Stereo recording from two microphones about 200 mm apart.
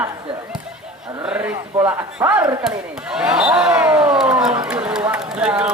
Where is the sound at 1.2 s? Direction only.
5° right (ahead or behind).